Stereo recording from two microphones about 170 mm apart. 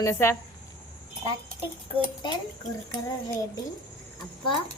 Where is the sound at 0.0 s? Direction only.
15° left (ahead or behind).